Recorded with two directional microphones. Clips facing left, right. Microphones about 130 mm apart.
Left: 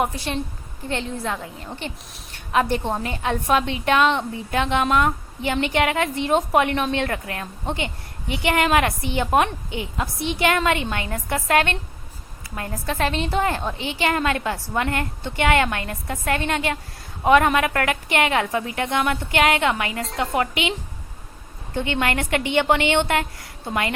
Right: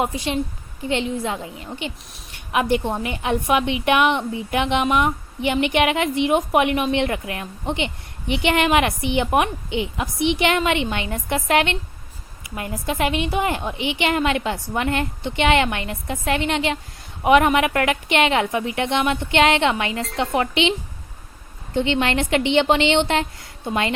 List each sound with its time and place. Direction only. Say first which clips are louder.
0.0 s a woman's voice: right 2 dB; 20° right (ahead or behind)
21.8 s a woman's voice: right 3 dB; 20° right (ahead or behind)